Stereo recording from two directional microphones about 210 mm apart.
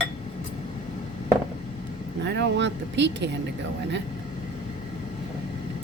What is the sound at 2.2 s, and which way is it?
Speech, 55° right (ahead or behind).